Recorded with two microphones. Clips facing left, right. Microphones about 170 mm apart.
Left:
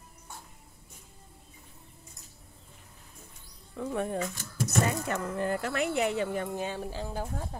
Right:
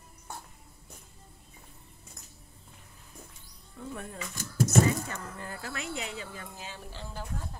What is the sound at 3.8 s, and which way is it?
Speech, 90° left.